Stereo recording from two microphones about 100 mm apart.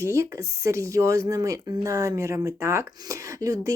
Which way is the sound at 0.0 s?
30° right (ahead or behind).